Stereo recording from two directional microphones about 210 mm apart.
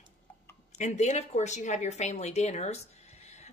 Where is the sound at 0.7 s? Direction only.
35° left (ahead or behind).